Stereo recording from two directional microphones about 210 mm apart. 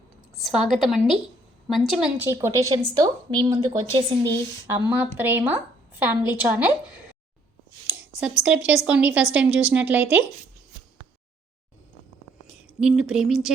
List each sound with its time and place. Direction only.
0.4 s a woman's voice: centre (ahead or behind)
7.9 s a sound: 10° right (ahead or behind)
8.4 s a woman's voice: 5° right (ahead or behind)
12.5 s speech: 5° right (ahead or behind)